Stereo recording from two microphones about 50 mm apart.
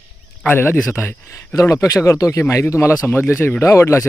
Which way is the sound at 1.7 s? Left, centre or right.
Left.